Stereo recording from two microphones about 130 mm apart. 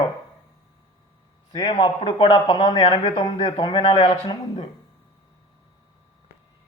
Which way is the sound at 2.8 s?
60° left (ahead or behind).